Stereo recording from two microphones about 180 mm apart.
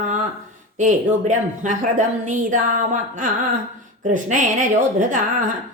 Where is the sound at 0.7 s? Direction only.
45° right (ahead or behind).